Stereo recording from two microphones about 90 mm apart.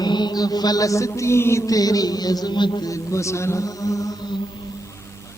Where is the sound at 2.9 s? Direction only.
35° left (ahead or behind).